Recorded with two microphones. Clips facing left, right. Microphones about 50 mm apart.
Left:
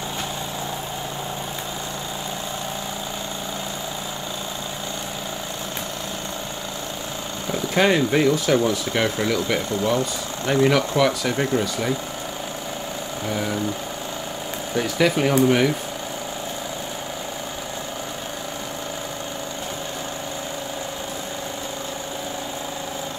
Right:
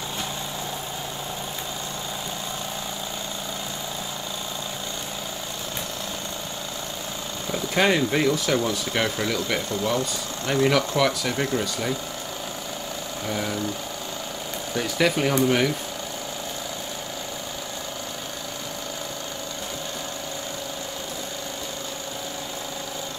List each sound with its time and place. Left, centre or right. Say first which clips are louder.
7.5 s speech: left 2 dB; centre
8.3 s speech: left 4 dB; centre
9.8 s speech: left 3 dB; left
13.3 s a sound: left 2 dB; centre
15.0 s speech: left 3 dB; centre